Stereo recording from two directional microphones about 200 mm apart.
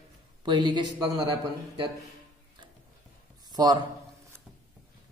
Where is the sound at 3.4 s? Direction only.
20° right (ahead or behind).